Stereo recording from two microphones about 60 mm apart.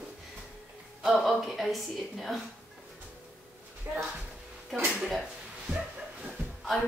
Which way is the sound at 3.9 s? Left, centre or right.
Right.